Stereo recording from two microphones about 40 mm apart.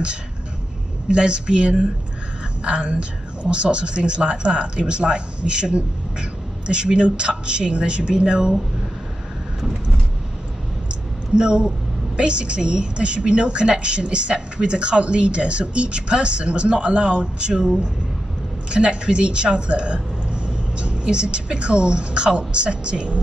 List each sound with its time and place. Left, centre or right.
1.0 s speech: right
9.6 s vehicle: centre
11.3 s speech: right